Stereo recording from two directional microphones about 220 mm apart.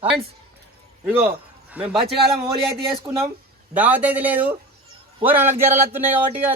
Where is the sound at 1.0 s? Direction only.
10° right (ahead or behind).